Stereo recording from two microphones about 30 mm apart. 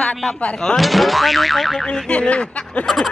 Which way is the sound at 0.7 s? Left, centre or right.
Centre.